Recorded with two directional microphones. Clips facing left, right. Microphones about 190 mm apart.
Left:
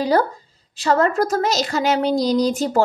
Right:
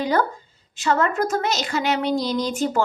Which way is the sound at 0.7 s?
35° left (ahead or behind).